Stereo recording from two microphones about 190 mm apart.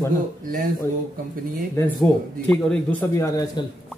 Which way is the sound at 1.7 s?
10° left (ahead or behind).